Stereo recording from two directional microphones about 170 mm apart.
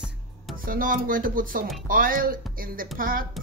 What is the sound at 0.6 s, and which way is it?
Speech, 55° right (ahead or behind).